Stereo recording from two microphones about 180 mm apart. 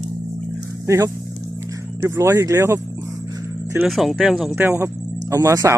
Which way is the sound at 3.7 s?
Centre (ahead or behind).